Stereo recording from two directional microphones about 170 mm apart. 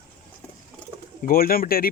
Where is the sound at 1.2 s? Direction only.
60° left (ahead or behind).